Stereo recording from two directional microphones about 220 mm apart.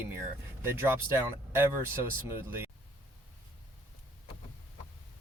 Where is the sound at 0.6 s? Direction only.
10° right (ahead or behind).